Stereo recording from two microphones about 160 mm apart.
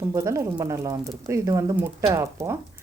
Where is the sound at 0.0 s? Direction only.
20° right (ahead or behind).